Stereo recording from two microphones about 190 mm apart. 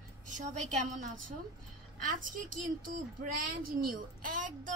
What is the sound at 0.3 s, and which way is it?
Speech, 40° right (ahead or behind).